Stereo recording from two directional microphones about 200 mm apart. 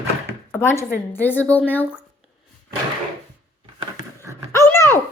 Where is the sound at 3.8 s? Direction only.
15° right (ahead or behind).